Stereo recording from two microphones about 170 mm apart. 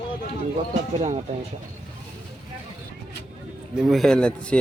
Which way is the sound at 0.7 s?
40° right (ahead or behind).